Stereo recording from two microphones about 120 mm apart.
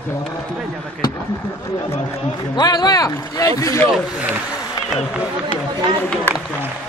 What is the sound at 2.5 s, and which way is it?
Speech, 35° left (ahead or behind).